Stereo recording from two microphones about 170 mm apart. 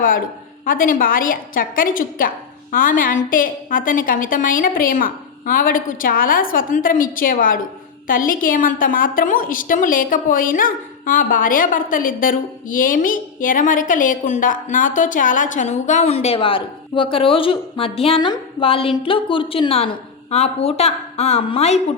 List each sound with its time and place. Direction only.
0.6 s a woman's voice: 55° left (ahead or behind); by 21.8 s 35° left (ahead or behind)